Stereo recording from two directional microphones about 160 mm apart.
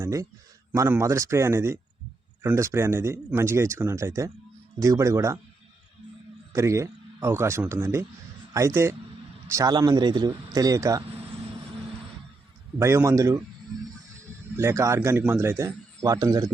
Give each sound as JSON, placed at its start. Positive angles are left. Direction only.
{"t": 0.0, "sound": "a sound", "side_deg": -20}
{"t": 0.7, "sound": "a man's voice", "side_deg": -20}
{"t": 6.5, "sound": "a man's voice", "side_deg": -20}
{"t": 11.1, "sound": "vehicle", "side_deg": -40}
{"t": 12.8, "sound": "a man's voice", "side_deg": -15}
{"t": 14.5, "sound": "a man's voice", "side_deg": -15}